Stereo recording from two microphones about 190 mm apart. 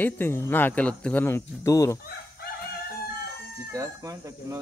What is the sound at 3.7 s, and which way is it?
Speech, 15° right (ahead or behind).